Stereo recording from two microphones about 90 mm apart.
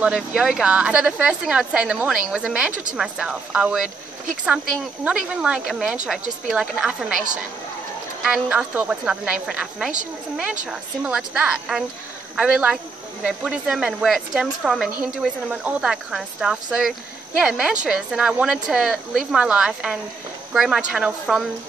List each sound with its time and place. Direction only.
0.0 s a woman's voice: 10° right (ahead or behind)
5.0 s a woman's voice: 10° right (ahead or behind)
14.9 s a woman's voice: 20° right (ahead or behind)
15.4 s a woman's voice: 5° right (ahead or behind)